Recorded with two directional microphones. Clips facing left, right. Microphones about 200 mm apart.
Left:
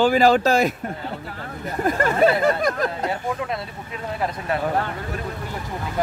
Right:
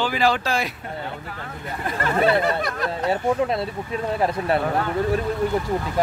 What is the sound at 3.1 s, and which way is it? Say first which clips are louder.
Speech: right 5 dB; 30° right (ahead or behind).